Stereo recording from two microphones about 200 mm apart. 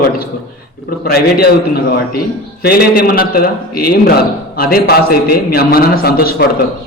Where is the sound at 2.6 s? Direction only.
50° left (ahead or behind).